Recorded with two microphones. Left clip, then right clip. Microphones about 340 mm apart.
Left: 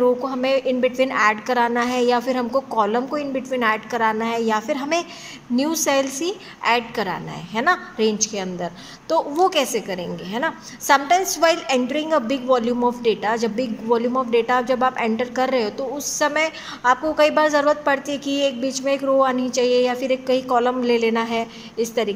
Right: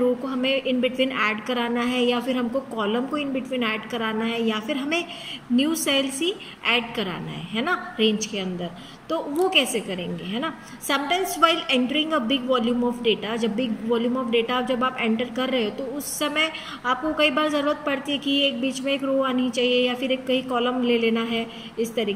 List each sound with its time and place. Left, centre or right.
0.2 s a woman's voice: centre